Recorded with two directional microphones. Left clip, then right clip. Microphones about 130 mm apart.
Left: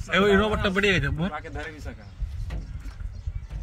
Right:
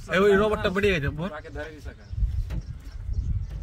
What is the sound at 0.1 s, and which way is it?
A man's voice, 50° right (ahead or behind).